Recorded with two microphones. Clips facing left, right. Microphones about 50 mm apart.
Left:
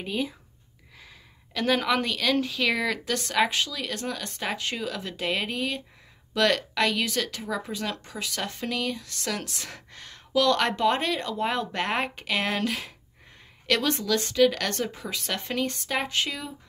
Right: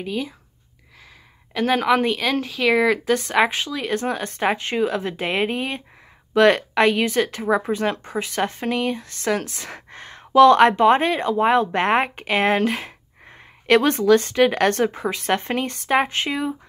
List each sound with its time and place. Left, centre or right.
0.0 s speech: centre
1.5 s speech: centre; by 16.5 s right